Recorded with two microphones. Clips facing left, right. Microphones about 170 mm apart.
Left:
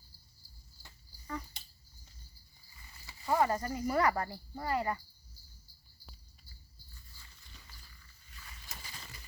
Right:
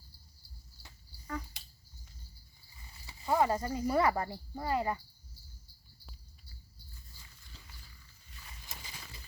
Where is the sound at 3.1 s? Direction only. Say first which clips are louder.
Right 1 dB; 15° right (ahead or behind).